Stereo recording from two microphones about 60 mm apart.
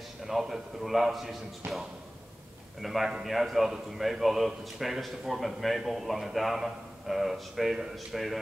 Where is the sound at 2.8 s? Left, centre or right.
Centre.